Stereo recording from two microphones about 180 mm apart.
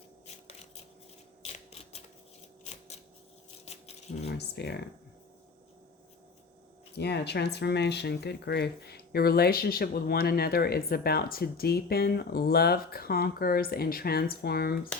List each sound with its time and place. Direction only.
1.4 s a sound: 35° left (ahead or behind)
4.3 s speech: 65° left (ahead or behind)
6.9 s speech: 65° left (ahead or behind)